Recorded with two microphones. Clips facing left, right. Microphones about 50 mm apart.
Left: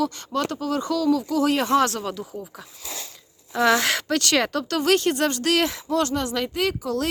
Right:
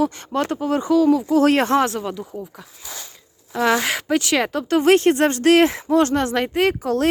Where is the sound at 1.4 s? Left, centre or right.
Right.